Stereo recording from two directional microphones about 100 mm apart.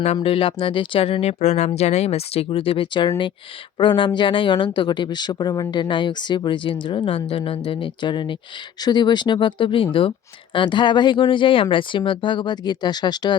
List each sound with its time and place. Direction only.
0.0 s speech: 80° left; by 13.3 s 45° left (ahead or behind)